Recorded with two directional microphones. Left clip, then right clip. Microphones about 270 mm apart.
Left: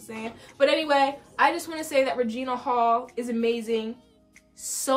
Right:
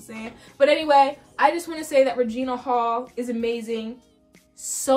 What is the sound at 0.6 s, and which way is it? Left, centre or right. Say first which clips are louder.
A woman's voice: right 5 dB; centre.